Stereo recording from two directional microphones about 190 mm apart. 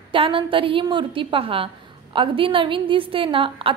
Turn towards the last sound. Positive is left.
turn(degrees=-25)  # may be behind; listen again after turning